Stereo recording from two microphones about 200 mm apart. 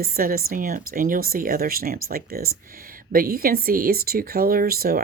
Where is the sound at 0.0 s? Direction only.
45° right (ahead or behind).